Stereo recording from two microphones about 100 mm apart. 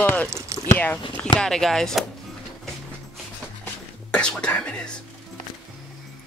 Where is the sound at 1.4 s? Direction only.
5° left (ahead or behind).